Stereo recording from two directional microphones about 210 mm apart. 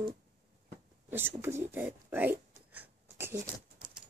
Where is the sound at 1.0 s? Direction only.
10° right (ahead or behind).